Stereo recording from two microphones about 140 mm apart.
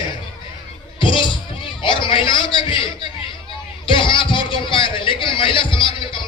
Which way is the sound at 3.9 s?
35° left (ahead or behind).